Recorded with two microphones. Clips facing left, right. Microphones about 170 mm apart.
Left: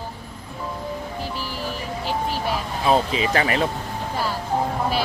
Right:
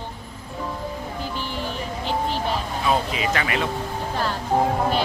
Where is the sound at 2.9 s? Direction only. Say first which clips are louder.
Left 3 dB; 30° left (ahead or behind).